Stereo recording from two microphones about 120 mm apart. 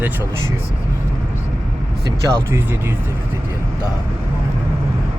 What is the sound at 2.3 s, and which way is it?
Speech, 25° right (ahead or behind).